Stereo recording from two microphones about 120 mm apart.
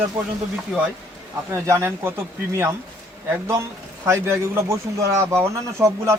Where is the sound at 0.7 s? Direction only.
5° left (ahead or behind).